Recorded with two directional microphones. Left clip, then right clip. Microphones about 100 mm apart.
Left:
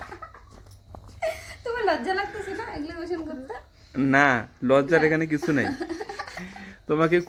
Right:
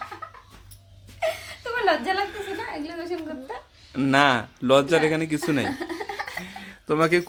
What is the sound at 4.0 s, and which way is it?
Speech, 30° right (ahead or behind).